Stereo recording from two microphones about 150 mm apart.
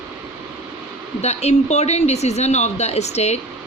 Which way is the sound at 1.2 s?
45° left (ahead or behind).